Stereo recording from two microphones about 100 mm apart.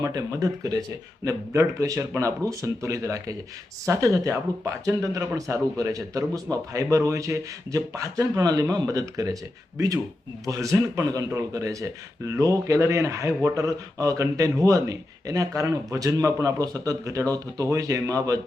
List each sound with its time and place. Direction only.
0.0 s speech: 35° right (ahead or behind)